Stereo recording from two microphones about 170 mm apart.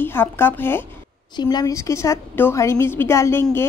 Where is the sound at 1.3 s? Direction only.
25° left (ahead or behind).